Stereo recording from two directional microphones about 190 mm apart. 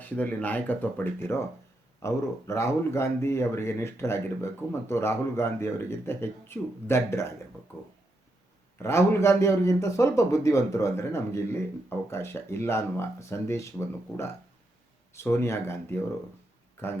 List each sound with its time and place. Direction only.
0.0 s speech: 10° left (ahead or behind)
8.8 s speech: 15° left (ahead or behind)